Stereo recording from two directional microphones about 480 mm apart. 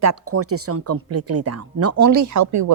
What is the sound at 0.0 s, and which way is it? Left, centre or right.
Speech, right.